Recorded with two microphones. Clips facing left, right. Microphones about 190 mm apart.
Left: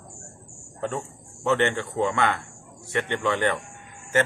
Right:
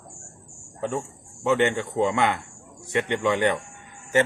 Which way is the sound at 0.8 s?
10° right (ahead or behind).